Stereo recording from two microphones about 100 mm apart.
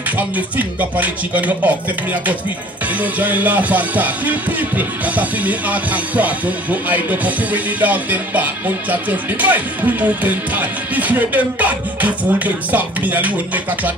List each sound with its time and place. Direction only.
0.6 s music: 15° right (ahead or behind)
3.0 s music: 15° right (ahead or behind)